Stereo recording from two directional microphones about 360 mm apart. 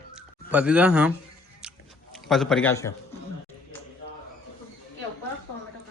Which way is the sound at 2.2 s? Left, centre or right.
Centre.